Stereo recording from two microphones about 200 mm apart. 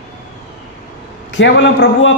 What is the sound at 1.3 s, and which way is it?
Speech, 70° left (ahead or behind).